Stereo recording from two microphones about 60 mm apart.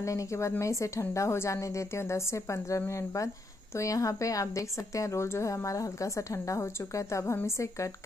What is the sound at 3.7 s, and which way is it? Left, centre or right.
A woman's voice, left.